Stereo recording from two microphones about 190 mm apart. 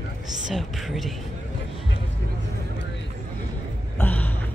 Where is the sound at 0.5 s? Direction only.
Centre (ahead or behind).